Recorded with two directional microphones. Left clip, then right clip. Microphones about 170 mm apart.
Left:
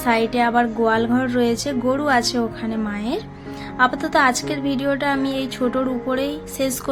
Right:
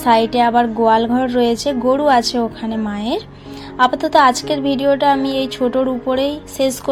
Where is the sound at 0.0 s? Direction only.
10° right (ahead or behind).